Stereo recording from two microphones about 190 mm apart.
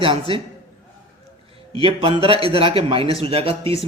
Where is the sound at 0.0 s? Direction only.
30° right (ahead or behind).